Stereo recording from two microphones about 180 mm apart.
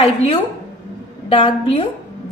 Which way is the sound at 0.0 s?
35° left (ahead or behind).